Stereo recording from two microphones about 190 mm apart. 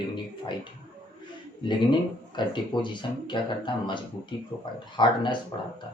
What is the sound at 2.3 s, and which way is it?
Speech, 25° left (ahead or behind).